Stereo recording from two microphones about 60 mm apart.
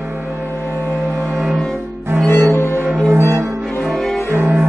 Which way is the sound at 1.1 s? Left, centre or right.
Right.